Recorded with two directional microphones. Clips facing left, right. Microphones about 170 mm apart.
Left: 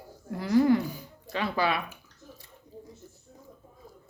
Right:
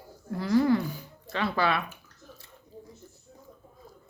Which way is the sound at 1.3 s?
15° left (ahead or behind).